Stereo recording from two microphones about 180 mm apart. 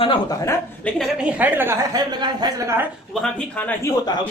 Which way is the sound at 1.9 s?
25° right (ahead or behind).